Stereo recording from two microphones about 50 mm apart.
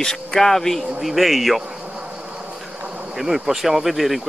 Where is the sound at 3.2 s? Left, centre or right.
Centre.